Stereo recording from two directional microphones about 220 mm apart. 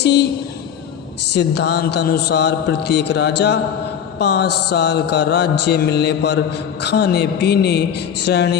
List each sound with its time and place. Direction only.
0.0 s mantra: 50° left (ahead or behind)
1.3 s mantra: 50° left (ahead or behind)